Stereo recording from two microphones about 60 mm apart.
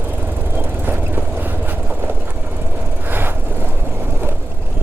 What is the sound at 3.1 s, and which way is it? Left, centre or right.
Vehicle, right.